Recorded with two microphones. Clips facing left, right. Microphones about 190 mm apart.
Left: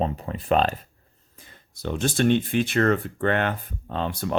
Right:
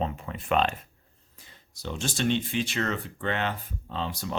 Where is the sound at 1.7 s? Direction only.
55° left (ahead or behind).